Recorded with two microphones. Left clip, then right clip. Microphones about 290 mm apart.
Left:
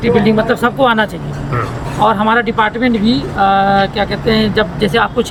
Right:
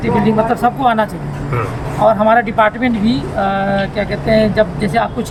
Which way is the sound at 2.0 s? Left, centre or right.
Centre.